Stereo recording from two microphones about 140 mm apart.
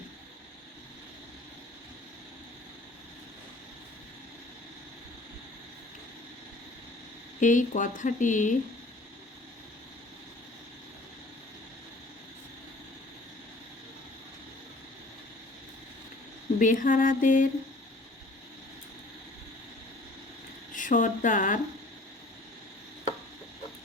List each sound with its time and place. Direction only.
7.3 s speech: 65° left (ahead or behind)
16.6 s a sound: 70° left (ahead or behind)
20.7 s speech: 70° left (ahead or behind)